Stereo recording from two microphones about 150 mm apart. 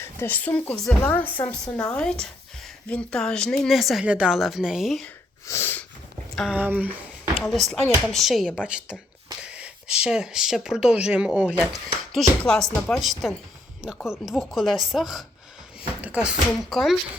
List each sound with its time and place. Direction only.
0.0 s speech: 15° left (ahead or behind)
5.5 s sneeze: 15° left (ahead or behind)
6.3 s speech: centre (ahead or behind)
6.6 s a sound: 10° right (ahead or behind)
7.5 s speech: centre (ahead or behind)